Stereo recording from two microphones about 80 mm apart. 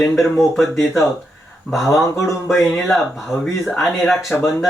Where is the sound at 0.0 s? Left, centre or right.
Centre.